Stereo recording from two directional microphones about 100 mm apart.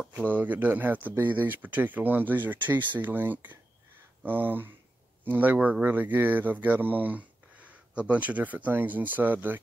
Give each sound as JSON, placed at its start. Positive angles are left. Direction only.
{"t": 0.1, "sound": "speech", "side_deg": -15}